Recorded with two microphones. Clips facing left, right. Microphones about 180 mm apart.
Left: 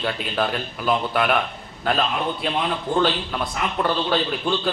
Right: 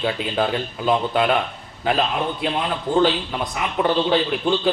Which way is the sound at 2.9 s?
15° right (ahead or behind).